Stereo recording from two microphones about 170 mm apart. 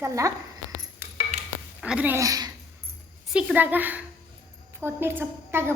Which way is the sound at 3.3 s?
10° right (ahead or behind).